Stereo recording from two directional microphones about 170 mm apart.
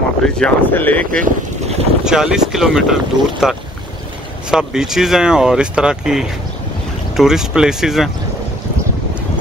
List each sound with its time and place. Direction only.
0.4 s speech: 10° left (ahead or behind)
1.2 s boat: 40° right (ahead or behind)
2.0 s speech: 5° right (ahead or behind)